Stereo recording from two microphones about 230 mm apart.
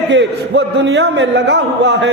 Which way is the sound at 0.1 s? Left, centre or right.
Right.